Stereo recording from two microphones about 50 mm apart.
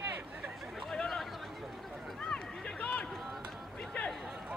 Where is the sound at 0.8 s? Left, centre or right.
Centre.